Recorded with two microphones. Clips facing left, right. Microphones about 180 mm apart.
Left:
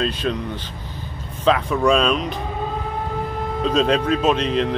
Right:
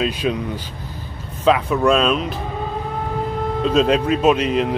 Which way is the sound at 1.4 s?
5° right (ahead or behind).